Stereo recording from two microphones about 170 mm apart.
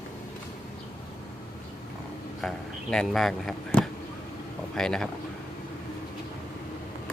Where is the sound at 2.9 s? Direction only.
5° left (ahead or behind).